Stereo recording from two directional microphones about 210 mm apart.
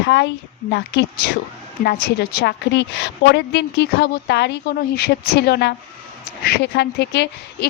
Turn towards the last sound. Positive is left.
turn(degrees=55)  # may be behind; listen again after turning